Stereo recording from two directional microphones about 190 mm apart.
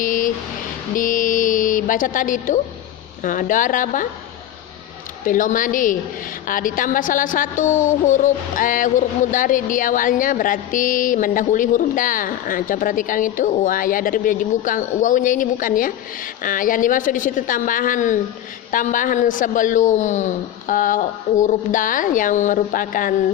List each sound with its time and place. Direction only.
0.0 s a sound: 45° left (ahead or behind)
0.9 s music: 45° left (ahead or behind)
3.2 s a woman's voice: 45° left (ahead or behind)
5.2 s a woman's voice: 45° left (ahead or behind)